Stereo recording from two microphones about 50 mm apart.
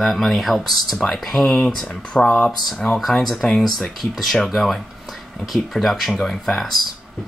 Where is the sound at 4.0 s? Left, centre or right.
Centre.